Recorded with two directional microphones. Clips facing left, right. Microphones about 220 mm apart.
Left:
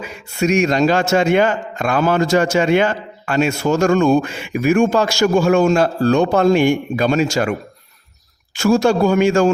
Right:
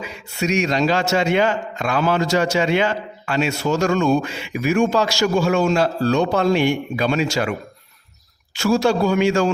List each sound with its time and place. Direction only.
0.0 s a man's voice: 50° left (ahead or behind)
8.5 s a man's voice: 50° left (ahead or behind)